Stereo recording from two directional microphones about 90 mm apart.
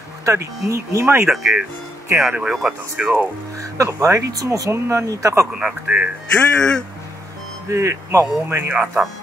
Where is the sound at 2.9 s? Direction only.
20° right (ahead or behind).